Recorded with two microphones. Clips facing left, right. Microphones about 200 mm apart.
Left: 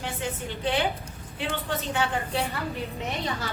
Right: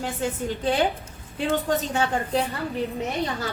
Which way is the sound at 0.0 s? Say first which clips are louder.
Right 5 dB; 40° right (ahead or behind).